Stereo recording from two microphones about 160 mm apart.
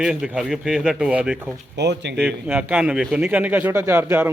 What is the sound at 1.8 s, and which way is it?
Speech, 90° right.